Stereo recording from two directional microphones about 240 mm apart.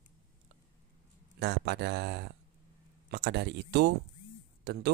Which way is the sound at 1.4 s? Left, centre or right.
Right.